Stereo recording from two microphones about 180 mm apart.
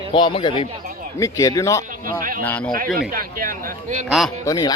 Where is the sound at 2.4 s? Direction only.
10° left (ahead or behind).